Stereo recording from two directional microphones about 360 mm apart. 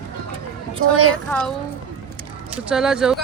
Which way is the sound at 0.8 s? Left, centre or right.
Right.